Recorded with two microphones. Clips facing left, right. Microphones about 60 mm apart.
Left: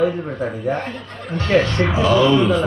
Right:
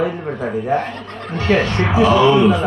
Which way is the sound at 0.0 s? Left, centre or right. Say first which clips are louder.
Left 1 dB; right.